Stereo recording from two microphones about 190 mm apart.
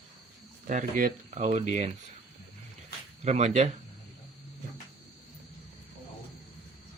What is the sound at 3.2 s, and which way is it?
Speech, 35° right (ahead or behind).